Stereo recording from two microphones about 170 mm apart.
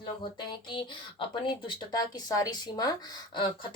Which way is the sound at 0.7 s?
30° left (ahead or behind).